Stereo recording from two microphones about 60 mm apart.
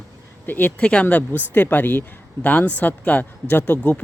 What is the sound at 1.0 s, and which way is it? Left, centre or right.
Speech, left.